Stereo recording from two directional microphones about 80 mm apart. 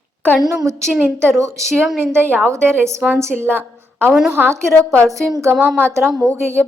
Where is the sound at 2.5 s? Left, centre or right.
Right.